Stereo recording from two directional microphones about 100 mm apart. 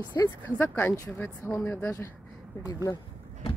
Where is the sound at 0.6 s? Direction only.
20° left (ahead or behind).